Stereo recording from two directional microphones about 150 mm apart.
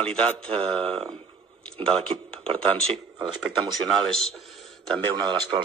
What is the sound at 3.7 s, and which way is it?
Speech, centre (ahead or behind).